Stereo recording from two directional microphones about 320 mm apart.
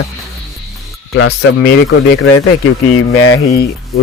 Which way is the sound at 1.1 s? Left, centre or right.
Left.